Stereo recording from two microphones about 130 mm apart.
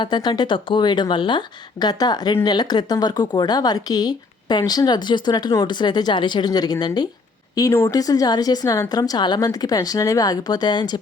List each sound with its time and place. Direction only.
0.0 s a woman's voice: 35° left (ahead or behind)